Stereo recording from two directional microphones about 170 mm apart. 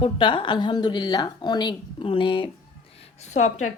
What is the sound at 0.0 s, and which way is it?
A woman's voice, 30° left (ahead or behind).